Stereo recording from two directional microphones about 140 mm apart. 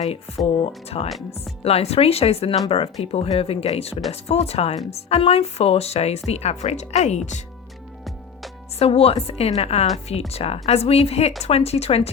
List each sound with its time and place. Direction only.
0.6 s speech: 45° left (ahead or behind)
8.8 s speech: 45° left (ahead or behind)